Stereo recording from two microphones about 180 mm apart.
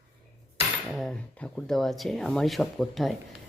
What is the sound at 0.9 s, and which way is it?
Speech, 5° left (ahead or behind).